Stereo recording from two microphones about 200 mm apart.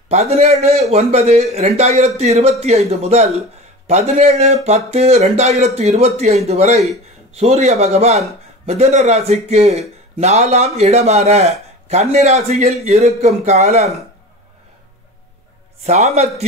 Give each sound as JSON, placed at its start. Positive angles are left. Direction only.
{"t": 0.1, "sound": "speech", "side_deg": -35}
{"t": 15.8, "sound": "speech", "side_deg": -35}